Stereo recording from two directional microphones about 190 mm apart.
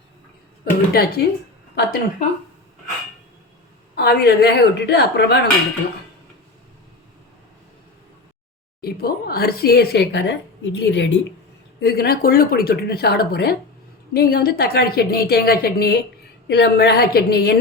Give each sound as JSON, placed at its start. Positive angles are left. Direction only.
{"t": 0.6, "sound": "speech", "side_deg": 50}
{"t": 1.7, "sound": "a sound", "side_deg": 60}
{"t": 3.9, "sound": "a woman's voice", "side_deg": 55}
{"t": 8.8, "sound": "a woman's voice", "side_deg": 55}
{"t": 11.8, "sound": "a woman's voice", "side_deg": 55}